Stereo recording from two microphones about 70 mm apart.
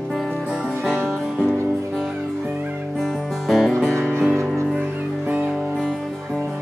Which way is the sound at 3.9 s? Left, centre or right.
Right.